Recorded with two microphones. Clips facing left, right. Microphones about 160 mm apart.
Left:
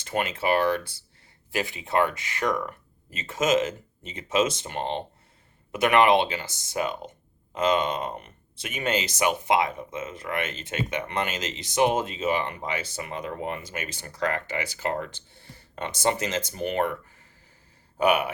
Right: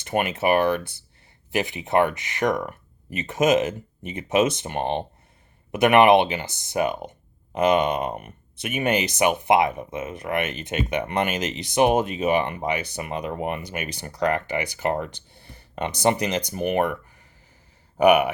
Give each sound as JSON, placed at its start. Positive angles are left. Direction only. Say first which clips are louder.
{"t": 0.3, "sound": "speech", "louder": "right 3 dB", "side_deg": -20}
{"t": 18.0, "sound": "speech", "louder": "right 6 dB", "side_deg": -15}